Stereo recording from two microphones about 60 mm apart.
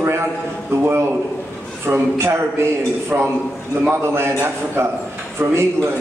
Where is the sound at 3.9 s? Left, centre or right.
Right.